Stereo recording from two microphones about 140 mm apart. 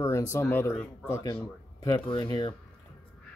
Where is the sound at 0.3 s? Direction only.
15° left (ahead or behind).